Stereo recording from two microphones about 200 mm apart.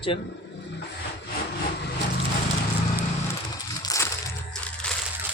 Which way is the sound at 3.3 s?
20° left (ahead or behind).